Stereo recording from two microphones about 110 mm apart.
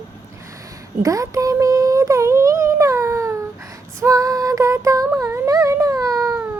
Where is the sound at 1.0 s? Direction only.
30° right (ahead or behind).